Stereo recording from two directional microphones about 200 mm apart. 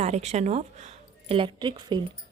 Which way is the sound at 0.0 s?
35° right (ahead or behind).